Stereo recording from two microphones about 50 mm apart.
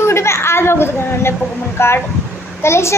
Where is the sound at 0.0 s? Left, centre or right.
Left.